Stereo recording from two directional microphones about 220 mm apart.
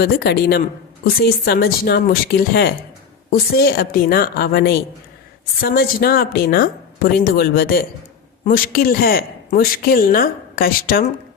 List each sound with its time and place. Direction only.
0.0 s a woman's voice: 45° left (ahead or behind)